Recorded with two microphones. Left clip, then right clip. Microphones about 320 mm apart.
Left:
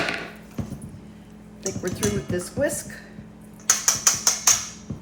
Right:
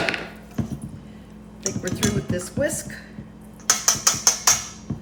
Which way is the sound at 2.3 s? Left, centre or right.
Centre.